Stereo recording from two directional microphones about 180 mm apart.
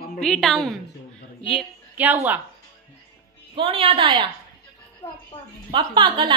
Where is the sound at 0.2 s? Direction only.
Centre (ahead or behind).